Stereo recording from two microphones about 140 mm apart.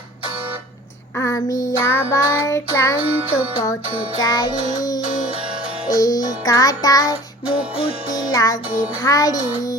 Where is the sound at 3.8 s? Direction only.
45° right (ahead or behind).